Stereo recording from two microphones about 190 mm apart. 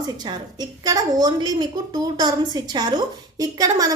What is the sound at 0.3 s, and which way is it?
A woman's voice, 20° right (ahead or behind).